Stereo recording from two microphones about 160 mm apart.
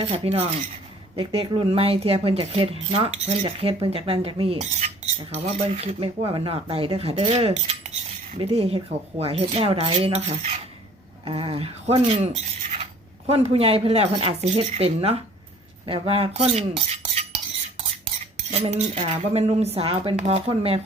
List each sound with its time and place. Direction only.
0.0 s speech: 35° right (ahead or behind)
15.9 s cutlery: 35° right (ahead or behind)
18.6 s speech: 40° right (ahead or behind)